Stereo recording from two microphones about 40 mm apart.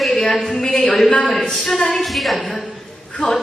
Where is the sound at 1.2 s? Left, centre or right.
Centre.